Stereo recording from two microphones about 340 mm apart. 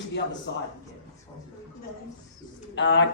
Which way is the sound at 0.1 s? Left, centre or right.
Left.